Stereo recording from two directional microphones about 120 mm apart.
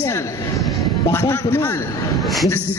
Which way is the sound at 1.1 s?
20° left (ahead or behind).